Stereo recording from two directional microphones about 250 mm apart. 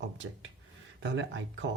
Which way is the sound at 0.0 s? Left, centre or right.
Right.